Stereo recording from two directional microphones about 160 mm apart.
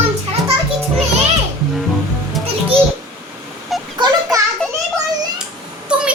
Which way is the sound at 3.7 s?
Centre (ahead or behind).